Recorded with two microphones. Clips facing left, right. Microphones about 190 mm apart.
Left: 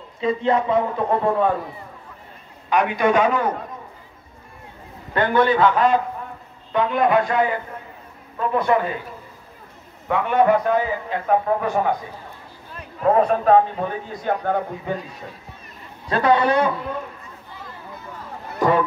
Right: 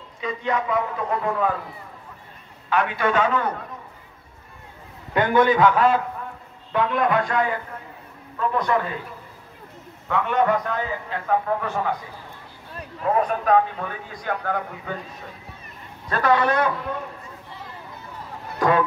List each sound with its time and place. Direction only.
0.2 s a man's voice: 30° left (ahead or behind)
2.7 s a man's voice: 15° left (ahead or behind)
5.1 s a man's voice: 15° right (ahead or behind)
7.1 s a man's voice: 15° left (ahead or behind)
10.0 s a man's voice: 15° left (ahead or behind)
13.0 s a man's voice: 35° left (ahead or behind)
16.2 s a man's voice: 20° left (ahead or behind)
18.6 s speech: centre (ahead or behind)